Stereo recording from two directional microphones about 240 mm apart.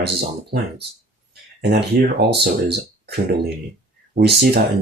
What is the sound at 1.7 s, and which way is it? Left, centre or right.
Speech, right.